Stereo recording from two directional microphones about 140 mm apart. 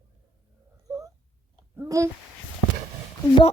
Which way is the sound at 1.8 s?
20° right (ahead or behind).